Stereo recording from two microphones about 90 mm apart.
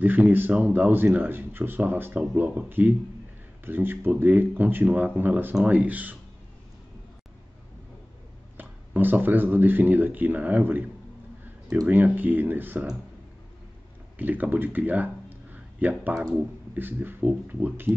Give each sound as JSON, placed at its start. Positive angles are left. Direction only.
{"t": 0.0, "sound": "speech", "side_deg": -20}
{"t": 8.5, "sound": "speech", "side_deg": -20}
{"t": 11.9, "sound": "speech", "side_deg": -20}
{"t": 14.1, "sound": "speech", "side_deg": -20}